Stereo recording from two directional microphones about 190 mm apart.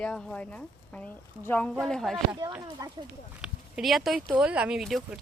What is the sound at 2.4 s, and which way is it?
Speech, 20° right (ahead or behind).